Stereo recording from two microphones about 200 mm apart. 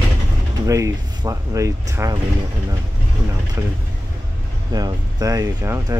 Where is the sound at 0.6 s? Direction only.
15° right (ahead or behind).